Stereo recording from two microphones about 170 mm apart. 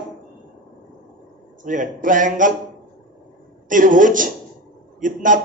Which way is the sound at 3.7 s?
50° right (ahead or behind).